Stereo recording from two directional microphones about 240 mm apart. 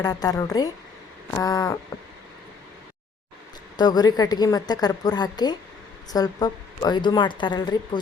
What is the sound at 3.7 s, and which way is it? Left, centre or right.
A woman's voice, centre.